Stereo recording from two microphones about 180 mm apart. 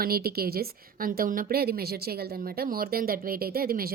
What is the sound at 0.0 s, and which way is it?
A woman's voice, 60° right (ahead or behind).